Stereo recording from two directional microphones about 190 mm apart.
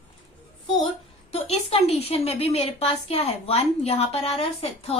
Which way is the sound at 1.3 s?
30° left (ahead or behind).